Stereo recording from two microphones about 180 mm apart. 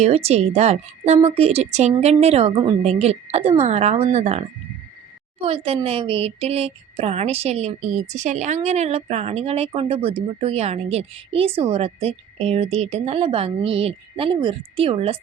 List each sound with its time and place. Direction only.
0.0 s speech: 35° right (ahead or behind)